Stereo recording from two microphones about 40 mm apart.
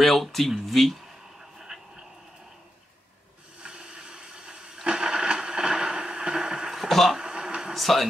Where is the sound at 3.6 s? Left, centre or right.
Right; by 7.1 s centre.